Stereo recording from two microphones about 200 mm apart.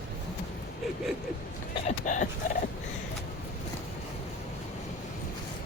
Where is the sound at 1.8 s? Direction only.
40° left (ahead or behind).